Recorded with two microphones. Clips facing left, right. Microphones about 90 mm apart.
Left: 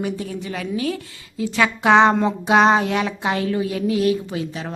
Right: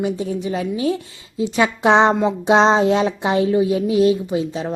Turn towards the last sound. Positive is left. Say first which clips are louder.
# right 5 dB
turn(degrees=-20)  # may be behind; listen again after turning